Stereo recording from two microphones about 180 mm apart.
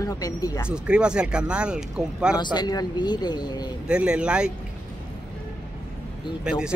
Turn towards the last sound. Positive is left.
turn(degrees=-5)  # may be behind; listen again after turning